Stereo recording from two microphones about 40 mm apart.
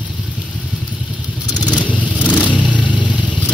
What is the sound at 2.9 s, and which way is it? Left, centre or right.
Vehicle, right.